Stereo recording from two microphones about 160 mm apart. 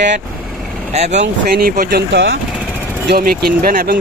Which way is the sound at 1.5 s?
70° right (ahead or behind).